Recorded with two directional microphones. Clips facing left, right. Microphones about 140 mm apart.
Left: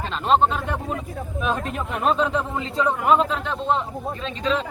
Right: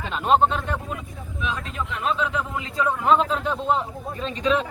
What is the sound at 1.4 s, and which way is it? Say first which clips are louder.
A man's voice: left 4 dB; 50° left (ahead or behind).